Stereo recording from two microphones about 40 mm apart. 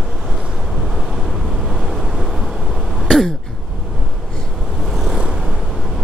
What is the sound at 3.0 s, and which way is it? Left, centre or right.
Throat clearing, centre.